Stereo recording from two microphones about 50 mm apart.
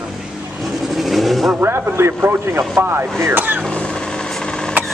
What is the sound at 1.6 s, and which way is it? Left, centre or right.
Speech, right.